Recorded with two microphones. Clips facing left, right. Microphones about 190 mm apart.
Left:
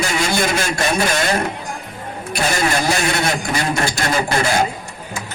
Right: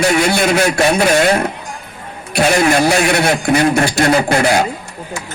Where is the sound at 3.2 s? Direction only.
60° right (ahead or behind).